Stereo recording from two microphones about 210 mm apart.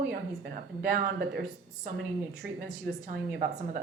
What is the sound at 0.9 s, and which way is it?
Speech, 50° right (ahead or behind).